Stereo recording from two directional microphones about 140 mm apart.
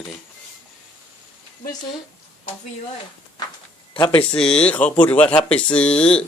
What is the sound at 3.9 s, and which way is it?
Speech, 35° left (ahead or behind).